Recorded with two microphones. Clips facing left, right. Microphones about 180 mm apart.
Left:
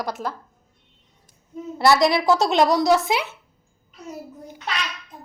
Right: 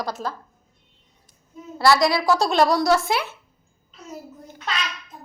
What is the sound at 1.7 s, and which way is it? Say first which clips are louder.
A woman's voice: left 1 dB; 20° left (ahead or behind).